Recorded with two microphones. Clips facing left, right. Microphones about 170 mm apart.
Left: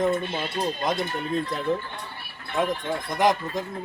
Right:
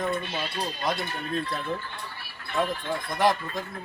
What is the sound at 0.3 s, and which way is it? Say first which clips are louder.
A man's voice: left 4 dB; 20° left (ahead or behind).